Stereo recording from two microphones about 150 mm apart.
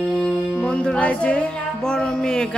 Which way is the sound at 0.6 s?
5° left (ahead or behind).